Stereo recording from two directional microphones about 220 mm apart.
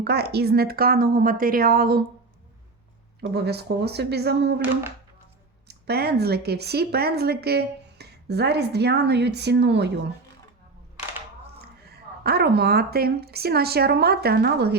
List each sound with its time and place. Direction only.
0.0 s speech: 50° right (ahead or behind)
3.3 s speech: 45° right (ahead or behind)
5.6 s speech: 45° right (ahead or behind)
11.9 s speech: 45° right (ahead or behind)